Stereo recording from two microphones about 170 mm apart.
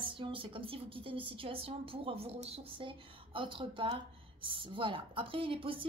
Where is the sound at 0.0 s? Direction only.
30° right (ahead or behind).